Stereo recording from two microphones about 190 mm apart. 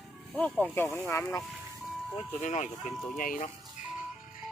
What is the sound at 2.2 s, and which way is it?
Speech, 35° left (ahead or behind).